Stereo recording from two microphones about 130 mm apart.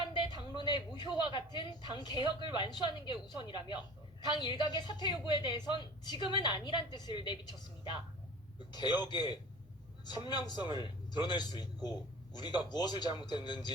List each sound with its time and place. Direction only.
0.0 s a sound: 35° left (ahead or behind)
0.6 s a man's voice: 35° left (ahead or behind)
8.7 s a man's voice: 35° left (ahead or behind)